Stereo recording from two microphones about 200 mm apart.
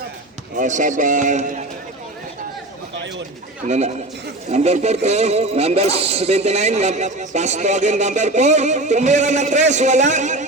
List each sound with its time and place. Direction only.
0.5 s a man's voice: 40° right (ahead or behind)
3.7 s a man's voice: 35° right (ahead or behind)